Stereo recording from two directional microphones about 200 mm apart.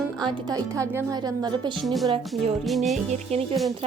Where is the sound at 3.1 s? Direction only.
30° right (ahead or behind).